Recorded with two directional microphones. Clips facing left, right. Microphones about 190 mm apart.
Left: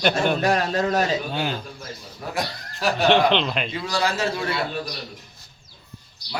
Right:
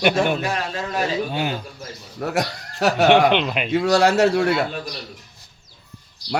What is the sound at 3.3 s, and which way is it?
Speech, 10° right (ahead or behind).